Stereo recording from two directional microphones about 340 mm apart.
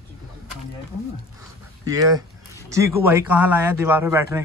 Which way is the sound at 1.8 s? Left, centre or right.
Centre.